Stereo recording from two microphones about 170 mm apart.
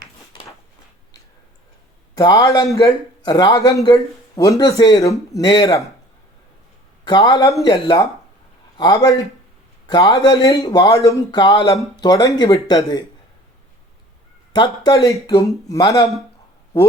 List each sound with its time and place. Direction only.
2.1 s speech: 20° left (ahead or behind)
7.0 s speech: 25° left (ahead or behind)
14.5 s speech: 25° left (ahead or behind)